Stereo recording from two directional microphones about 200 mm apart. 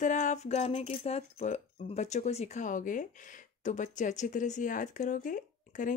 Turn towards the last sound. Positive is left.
turn(degrees=40)  # may be behind; listen again after turning